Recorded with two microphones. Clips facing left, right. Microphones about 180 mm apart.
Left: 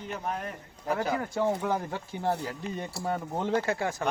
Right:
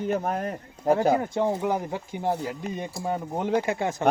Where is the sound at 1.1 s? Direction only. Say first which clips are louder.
Right 4 dB; 20° right (ahead or behind).